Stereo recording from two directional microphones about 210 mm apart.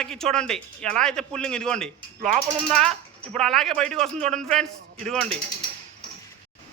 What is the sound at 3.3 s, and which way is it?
A man's voice, centre (ahead or behind).